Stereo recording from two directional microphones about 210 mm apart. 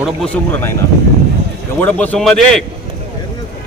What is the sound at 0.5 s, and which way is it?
Speech, 10° left (ahead or behind).